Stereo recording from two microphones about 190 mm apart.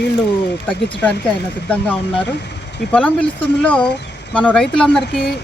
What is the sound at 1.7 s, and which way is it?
Speech, 5° left (ahead or behind).